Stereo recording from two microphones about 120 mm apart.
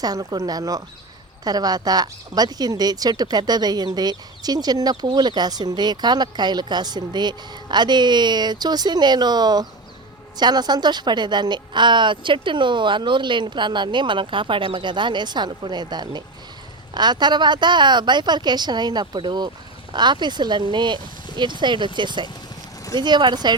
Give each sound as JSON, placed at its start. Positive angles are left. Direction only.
{"t": 0.0, "sound": "speech", "side_deg": -30}